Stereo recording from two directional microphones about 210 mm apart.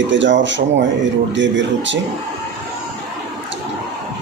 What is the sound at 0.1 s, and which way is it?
Speech, 60° right (ahead or behind).